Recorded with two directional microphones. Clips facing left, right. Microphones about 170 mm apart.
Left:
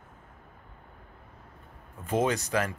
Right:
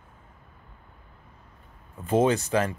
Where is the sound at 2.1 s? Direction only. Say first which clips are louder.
Right 5 dB; 30° right (ahead or behind).